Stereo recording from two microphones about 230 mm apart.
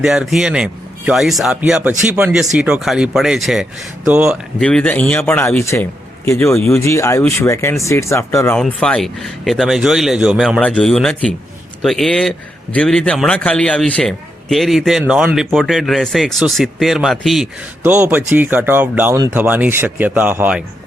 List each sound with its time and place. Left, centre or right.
0.0 s a man's voice: centre